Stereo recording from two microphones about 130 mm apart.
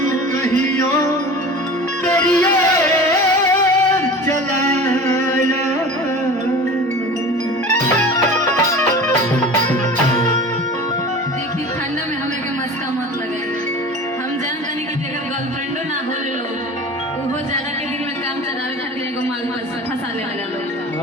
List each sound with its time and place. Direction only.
0.1 s music: 75° right (ahead or behind)
0.6 s music: 20° left (ahead or behind)
2.3 s music: 20° left (ahead or behind)
4.5 s music: 65° right (ahead or behind)
5.0 s music: 20° left (ahead or behind)